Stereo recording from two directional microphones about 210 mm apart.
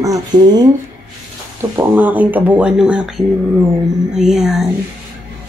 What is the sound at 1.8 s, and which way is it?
A woman's voice, 10° right (ahead or behind).